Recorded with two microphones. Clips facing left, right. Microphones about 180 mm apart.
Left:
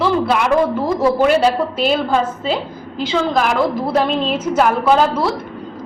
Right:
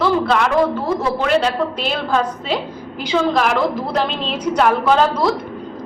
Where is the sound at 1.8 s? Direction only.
5° left (ahead or behind).